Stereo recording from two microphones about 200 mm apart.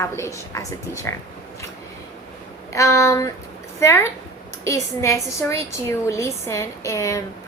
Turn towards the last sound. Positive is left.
turn(degrees=15)  # may be behind; listen again after turning